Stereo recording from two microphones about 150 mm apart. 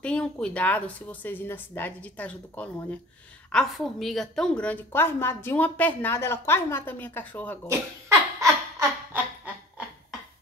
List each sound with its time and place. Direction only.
0.0 s a woman's voice: 5° left (ahead or behind)
7.6 s laughter: 20° right (ahead or behind)